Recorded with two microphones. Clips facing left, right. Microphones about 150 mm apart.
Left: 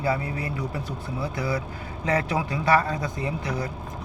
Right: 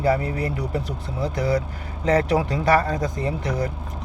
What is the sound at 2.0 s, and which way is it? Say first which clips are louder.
A man's voice: right 6 dB; 40° right (ahead or behind).